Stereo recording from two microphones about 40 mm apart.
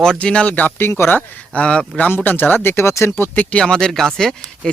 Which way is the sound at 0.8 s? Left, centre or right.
Left.